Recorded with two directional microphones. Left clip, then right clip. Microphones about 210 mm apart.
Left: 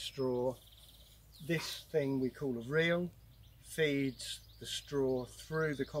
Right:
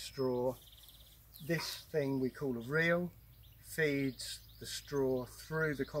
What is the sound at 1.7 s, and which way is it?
Speech, 5° right (ahead or behind).